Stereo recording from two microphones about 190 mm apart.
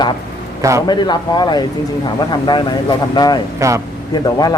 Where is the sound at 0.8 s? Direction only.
25° left (ahead or behind).